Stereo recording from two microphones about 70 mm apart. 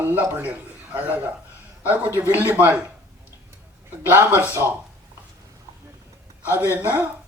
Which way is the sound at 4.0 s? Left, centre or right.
Right.